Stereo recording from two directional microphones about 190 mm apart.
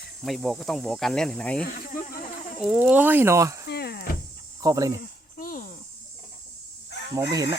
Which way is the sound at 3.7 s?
55° left (ahead or behind).